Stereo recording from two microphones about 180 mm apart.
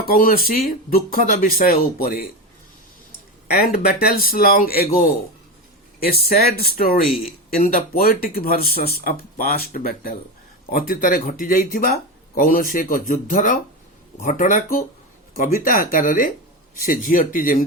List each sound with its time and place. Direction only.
0.0 s speech: 55° left (ahead or behind)
3.5 s speech: 55° left (ahead or behind)